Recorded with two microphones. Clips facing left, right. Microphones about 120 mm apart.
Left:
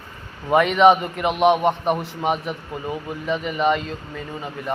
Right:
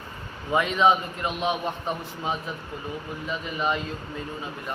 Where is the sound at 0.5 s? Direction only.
75° left (ahead or behind).